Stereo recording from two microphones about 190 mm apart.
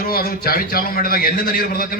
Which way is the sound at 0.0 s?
50° left (ahead or behind).